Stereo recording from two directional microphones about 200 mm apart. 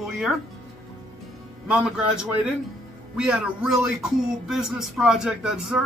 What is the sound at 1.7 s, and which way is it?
Speech, 5° right (ahead or behind).